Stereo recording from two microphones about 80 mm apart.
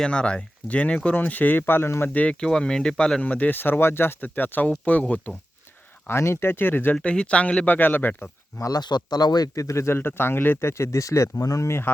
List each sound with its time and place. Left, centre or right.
0.0 s speech: centre; by 2.0 s left
2.1 s speech: centre
6.1 s speech: left
6.9 s speech: centre
8.5 s speech: left
8.8 s speech: left
9.6 s speech: left